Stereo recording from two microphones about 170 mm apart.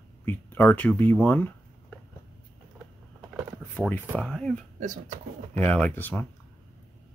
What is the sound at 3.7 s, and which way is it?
Speech, 10° left (ahead or behind).